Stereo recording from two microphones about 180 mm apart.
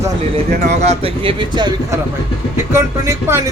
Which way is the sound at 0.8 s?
35° right (ahead or behind).